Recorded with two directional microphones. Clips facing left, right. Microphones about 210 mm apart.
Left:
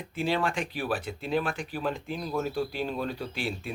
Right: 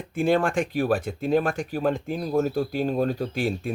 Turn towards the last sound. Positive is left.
turn(degrees=-45)  # may be behind; listen again after turning